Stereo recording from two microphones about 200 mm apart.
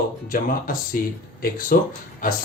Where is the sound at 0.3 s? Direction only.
45° left (ahead or behind).